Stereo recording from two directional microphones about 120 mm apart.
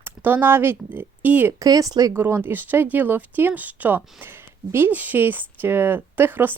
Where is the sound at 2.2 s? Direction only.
15° right (ahead or behind).